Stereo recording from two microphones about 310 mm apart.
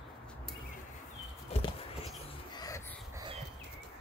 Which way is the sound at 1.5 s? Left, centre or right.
Centre.